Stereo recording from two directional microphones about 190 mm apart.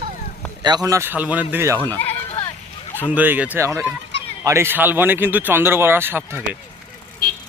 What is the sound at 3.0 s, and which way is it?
Speech, 10° right (ahead or behind).